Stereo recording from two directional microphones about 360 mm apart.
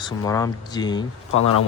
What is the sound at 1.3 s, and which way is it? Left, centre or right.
Speech, left.